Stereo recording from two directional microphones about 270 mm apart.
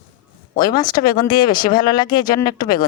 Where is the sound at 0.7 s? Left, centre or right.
Centre.